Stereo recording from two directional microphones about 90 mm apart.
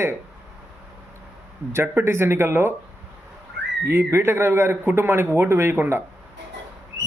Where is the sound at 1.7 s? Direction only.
30° right (ahead or behind).